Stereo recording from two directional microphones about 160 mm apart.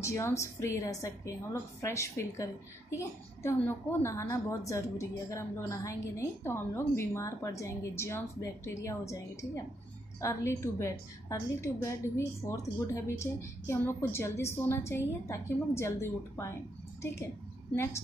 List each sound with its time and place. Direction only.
0.0 s a woman's voice: 20° left (ahead or behind)